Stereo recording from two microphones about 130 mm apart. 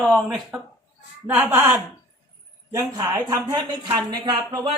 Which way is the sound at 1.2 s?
10° right (ahead or behind).